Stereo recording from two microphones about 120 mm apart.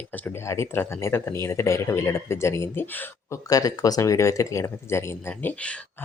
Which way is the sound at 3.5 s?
30° left (ahead or behind).